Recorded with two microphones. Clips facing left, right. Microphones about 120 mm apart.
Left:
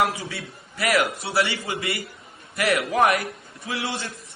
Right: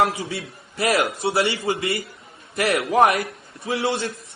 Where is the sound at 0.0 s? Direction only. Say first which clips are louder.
Right 3 dB; 30° right (ahead or behind).